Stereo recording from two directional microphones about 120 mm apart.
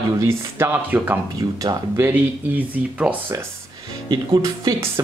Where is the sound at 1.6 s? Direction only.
25° right (ahead or behind).